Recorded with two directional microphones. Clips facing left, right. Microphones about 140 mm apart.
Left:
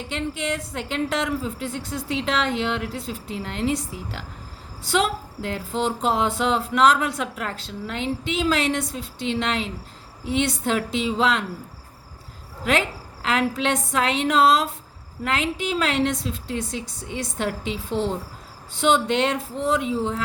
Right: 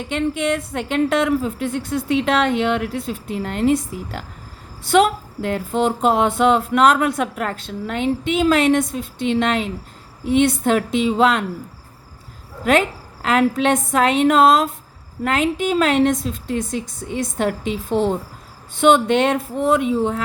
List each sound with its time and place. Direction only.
0.1 s a woman's voice: 55° right (ahead or behind)
12.7 s speech: 50° right (ahead or behind)